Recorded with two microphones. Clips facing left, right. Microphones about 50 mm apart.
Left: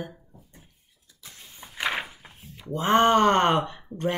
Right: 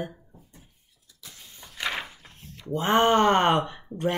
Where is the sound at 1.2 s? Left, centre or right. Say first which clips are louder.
Left 1 dB; centre.